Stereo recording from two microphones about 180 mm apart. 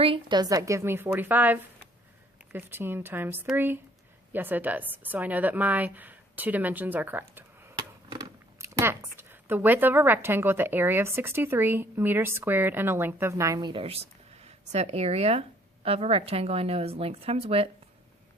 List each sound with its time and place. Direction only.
0.0 s a woman's voice: 25° right (ahead or behind)